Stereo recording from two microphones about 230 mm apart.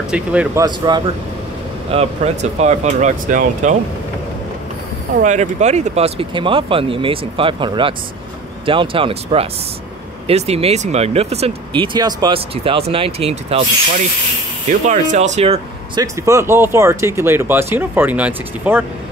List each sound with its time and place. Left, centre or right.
0.1 s speech: centre
0.7 s speech: centre
5.2 s speech: right
14.7 s speech: right; by 18.9 s centre